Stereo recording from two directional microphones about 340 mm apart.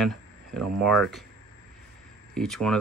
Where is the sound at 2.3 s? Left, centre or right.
Centre.